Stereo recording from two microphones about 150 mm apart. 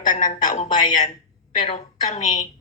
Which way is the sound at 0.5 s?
50° left (ahead or behind).